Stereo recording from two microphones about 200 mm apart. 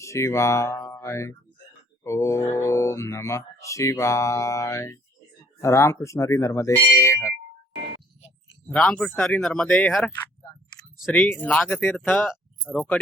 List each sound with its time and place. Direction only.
0.0 s speech: 15° left (ahead or behind)
8.6 s speech: 5° left (ahead or behind)